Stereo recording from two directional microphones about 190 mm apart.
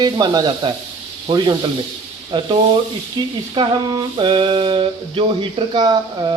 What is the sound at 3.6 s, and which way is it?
Sizzle, 20° right (ahead or behind).